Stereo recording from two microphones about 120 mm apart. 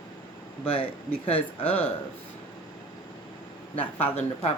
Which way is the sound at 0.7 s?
50° left (ahead or behind).